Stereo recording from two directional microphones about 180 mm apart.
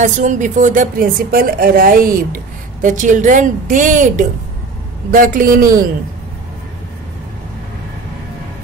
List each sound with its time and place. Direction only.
0.0 s a woman's voice: 45° right (ahead or behind)